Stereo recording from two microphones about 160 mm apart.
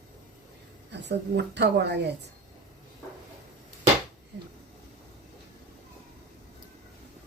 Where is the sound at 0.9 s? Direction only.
90° right.